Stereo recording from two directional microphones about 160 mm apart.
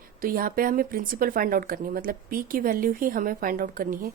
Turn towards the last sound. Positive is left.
turn(degrees=-60)  # may be behind; listen again after turning